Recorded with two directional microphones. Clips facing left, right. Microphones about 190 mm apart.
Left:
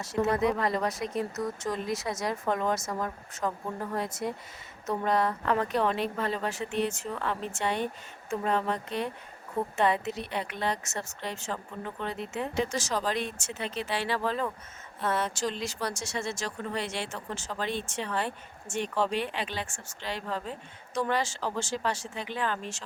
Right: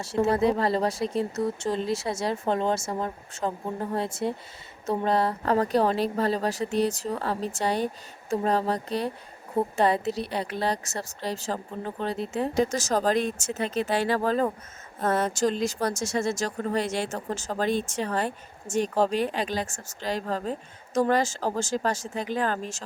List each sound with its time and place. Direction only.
0.0 s speech: 30° right (ahead or behind)